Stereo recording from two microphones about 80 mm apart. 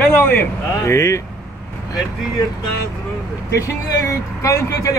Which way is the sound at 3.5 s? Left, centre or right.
Left.